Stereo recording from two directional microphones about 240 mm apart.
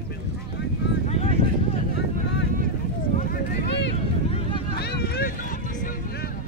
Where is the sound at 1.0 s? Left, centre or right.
Left.